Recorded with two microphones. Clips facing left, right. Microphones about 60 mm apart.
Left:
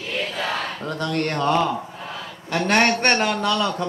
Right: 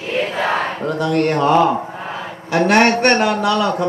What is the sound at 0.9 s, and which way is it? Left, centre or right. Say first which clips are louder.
Speech: right 7 dB; centre.